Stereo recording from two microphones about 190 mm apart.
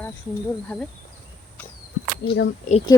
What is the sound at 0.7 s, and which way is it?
Speech, 10° left (ahead or behind).